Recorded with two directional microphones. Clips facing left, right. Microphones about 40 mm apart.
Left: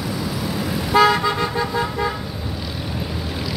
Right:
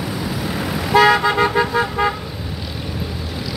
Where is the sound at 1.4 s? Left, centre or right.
Right.